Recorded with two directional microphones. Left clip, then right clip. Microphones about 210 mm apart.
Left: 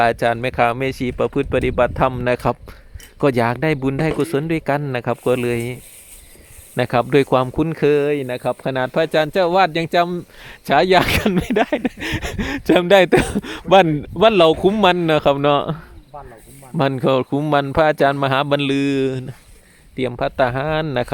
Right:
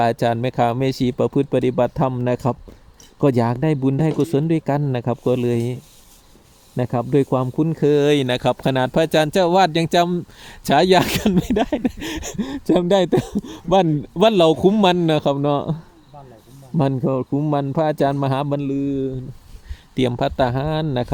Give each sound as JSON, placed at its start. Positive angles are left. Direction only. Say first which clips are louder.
{"t": 0.0, "sound": "speech", "louder": "left 2 dB", "side_deg": -5}
{"t": 8.0, "sound": "speech", "louder": "right 3 dB", "side_deg": -20}
{"t": 16.7, "sound": "speech", "louder": "left 2 dB", "side_deg": 0}
{"t": 17.0, "sound": "speech", "louder": "left 5 dB", "side_deg": 10}
{"t": 17.4, "sound": "speech", "louder": "left 5 dB", "side_deg": 0}
{"t": 18.7, "sound": "speech", "louder": "left 4 dB", "side_deg": 25}
{"t": 20.0, "sound": "speech", "louder": "left 1 dB", "side_deg": -15}